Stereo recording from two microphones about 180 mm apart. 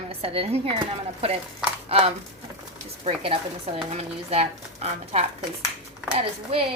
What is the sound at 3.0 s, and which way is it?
A woman's voice, 35° right (ahead or behind).